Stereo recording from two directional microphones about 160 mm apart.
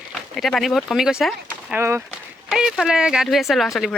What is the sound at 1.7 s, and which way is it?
Speech, 15° right (ahead or behind).